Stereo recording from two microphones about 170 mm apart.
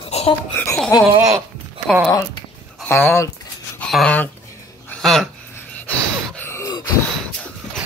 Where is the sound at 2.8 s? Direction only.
10° left (ahead or behind).